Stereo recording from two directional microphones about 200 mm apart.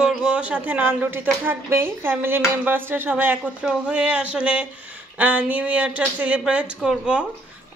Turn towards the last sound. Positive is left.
turn(degrees=-5)  # may be behind; listen again after turning